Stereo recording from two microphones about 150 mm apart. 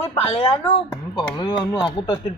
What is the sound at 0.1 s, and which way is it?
Speech, 40° left (ahead or behind).